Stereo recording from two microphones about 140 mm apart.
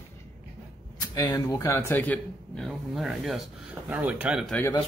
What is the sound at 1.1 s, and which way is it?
Speech, 25° left (ahead or behind).